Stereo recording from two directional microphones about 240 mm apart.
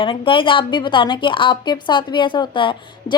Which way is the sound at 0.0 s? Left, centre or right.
Left.